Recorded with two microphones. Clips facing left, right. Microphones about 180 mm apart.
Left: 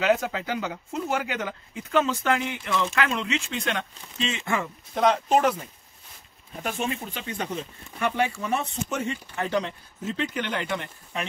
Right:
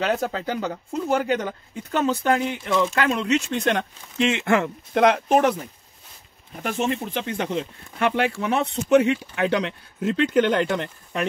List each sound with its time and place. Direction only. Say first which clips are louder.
0.0 s speech: even; 35° right (ahead or behind)
4.2 s speech: right 8 dB; 70° right (ahead or behind)
6.8 s speech: right 9 dB; 70° right (ahead or behind); by 11.2 s 50° right (ahead or behind)